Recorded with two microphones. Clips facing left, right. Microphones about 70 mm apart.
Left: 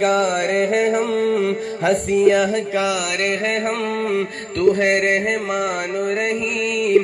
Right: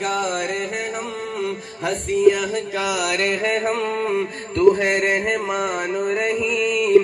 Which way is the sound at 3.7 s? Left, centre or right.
Left.